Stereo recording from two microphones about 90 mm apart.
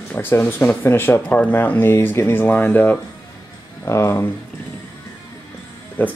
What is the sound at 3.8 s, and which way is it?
Speech, 35° left (ahead or behind).